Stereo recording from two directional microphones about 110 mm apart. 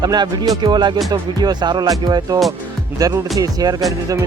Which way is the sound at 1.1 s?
40° right (ahead or behind).